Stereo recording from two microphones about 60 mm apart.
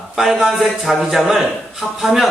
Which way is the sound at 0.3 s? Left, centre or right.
Centre.